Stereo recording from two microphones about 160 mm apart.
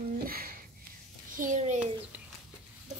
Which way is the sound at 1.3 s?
50° right (ahead or behind).